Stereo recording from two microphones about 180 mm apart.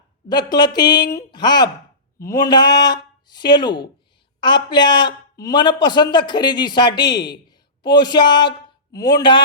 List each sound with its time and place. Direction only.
0.3 s a man's voice: 25° left (ahead or behind)